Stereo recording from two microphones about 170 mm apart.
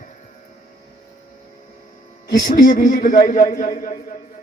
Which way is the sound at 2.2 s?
55° left (ahead or behind).